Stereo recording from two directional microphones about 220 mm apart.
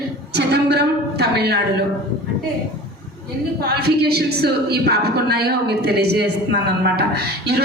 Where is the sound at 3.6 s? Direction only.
45° right (ahead or behind).